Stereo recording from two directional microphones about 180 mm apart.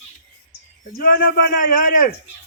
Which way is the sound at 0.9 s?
55° left (ahead or behind).